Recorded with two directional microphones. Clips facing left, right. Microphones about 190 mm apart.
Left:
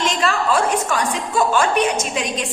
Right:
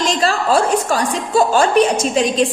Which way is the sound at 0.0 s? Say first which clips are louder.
Right 3 dB; 35° right (ahead or behind).